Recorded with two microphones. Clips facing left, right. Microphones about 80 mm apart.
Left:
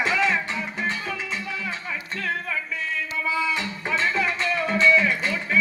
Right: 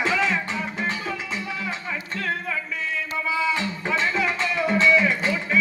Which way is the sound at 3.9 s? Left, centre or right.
Centre.